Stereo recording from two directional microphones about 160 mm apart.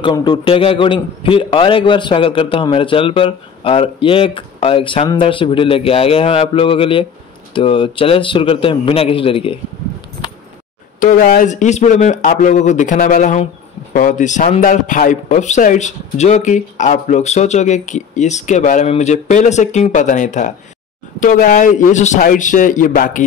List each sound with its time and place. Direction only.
0.0 s a man's voice: 25° left (ahead or behind)
11.0 s speech: 55° left (ahead or behind)